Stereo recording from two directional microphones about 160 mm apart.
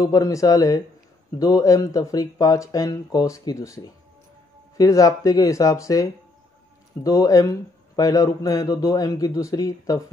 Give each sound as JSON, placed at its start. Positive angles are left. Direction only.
{"t": 0.0, "sound": "a man's voice", "side_deg": 20}